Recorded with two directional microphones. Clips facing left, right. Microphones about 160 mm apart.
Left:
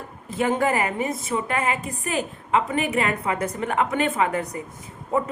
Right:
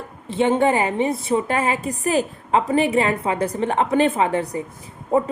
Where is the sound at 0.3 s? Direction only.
25° right (ahead or behind).